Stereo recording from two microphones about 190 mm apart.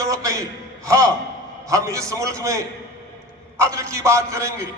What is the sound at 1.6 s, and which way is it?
A man's voice, 15° right (ahead or behind).